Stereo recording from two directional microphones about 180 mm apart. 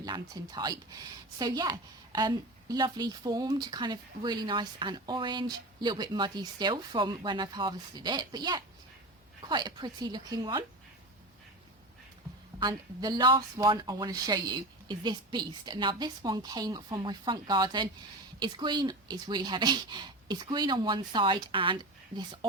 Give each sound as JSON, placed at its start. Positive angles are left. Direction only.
{"t": 0.0, "sound": "a woman's voice", "side_deg": -20}
{"t": 12.5, "sound": "a woman's voice", "side_deg": -25}